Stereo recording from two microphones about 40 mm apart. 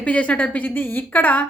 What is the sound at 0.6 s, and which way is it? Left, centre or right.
Speech, left.